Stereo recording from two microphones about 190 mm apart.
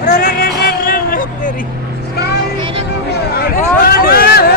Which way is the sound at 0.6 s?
50° left (ahead or behind).